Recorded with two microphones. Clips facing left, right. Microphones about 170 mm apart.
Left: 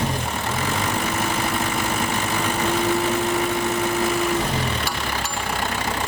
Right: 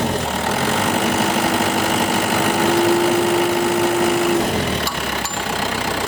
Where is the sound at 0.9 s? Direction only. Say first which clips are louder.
Right 6 dB; 90° right.